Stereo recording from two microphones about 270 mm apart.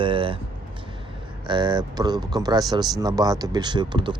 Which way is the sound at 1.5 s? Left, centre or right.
Centre.